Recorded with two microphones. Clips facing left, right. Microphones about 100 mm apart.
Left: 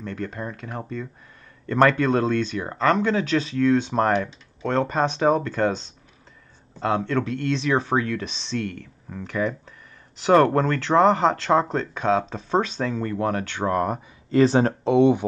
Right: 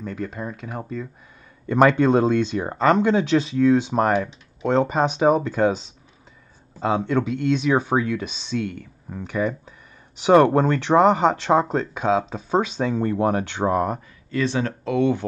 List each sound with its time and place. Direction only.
0.0 s speech: 5° right (ahead or behind)
13.7 s speech: centre (ahead or behind)
14.3 s speech: 35° left (ahead or behind)
14.7 s speech: 25° left (ahead or behind)